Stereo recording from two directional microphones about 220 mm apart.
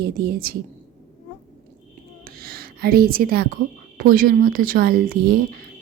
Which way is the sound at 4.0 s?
40° right (ahead or behind).